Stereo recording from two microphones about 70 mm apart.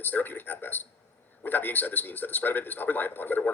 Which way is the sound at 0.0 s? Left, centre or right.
Left.